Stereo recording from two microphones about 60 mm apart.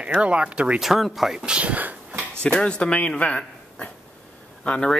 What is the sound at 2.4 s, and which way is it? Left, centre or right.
A man's voice, centre.